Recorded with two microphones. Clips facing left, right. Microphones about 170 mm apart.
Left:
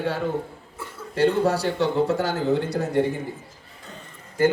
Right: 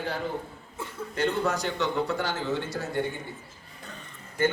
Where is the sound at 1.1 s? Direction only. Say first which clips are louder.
Left 7 dB; 35° left (ahead or behind).